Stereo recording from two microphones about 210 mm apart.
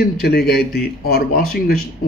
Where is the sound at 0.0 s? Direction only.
50° left (ahead or behind).